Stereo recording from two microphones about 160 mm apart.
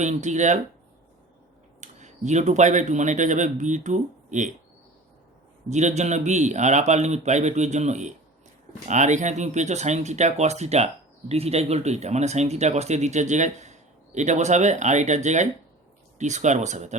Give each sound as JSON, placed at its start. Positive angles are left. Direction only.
{"t": 0.0, "sound": "speech", "side_deg": -50}
{"t": 1.8, "sound": "speech", "side_deg": -45}
{"t": 5.6, "sound": "speech", "side_deg": -45}